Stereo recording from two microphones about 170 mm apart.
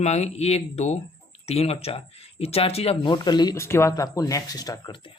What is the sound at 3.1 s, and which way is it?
Speech, 25° left (ahead or behind).